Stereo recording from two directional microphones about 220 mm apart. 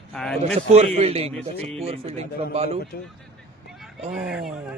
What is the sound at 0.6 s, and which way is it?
A man's voice, 30° right (ahead or behind).